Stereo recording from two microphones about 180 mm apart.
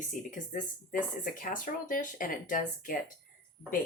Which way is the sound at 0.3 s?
45° left (ahead or behind).